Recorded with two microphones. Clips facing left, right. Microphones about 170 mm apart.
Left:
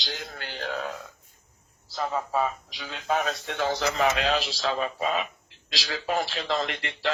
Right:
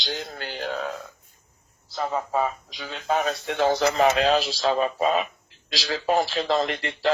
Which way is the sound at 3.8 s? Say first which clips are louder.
Right 4 dB; 40° right (ahead or behind).